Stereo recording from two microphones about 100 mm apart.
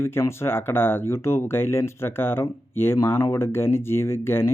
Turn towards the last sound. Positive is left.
turn(degrees=25)  # may be behind; listen again after turning